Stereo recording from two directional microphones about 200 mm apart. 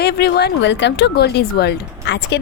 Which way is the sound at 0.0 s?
55° left (ahead or behind).